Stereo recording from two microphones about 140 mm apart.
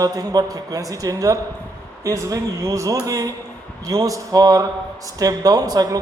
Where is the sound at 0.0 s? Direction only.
25° right (ahead or behind).